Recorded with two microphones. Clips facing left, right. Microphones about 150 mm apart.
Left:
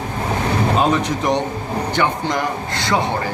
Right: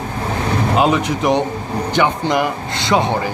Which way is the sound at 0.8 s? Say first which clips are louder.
Right 2 dB; 10° right (ahead or behind).